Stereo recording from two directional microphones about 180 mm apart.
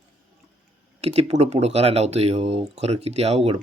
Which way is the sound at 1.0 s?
35° right (ahead or behind).